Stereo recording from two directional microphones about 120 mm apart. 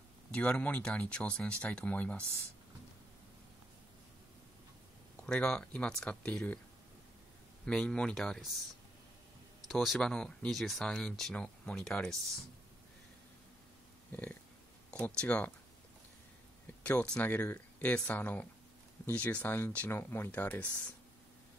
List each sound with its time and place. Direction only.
0.3 s speech: 10° left (ahead or behind)
5.2 s speech: 10° left (ahead or behind)
7.6 s speech: 10° left (ahead or behind)
9.7 s speech: 5° left (ahead or behind)
14.1 s speech: 15° left (ahead or behind)
16.8 s speech: 10° left (ahead or behind)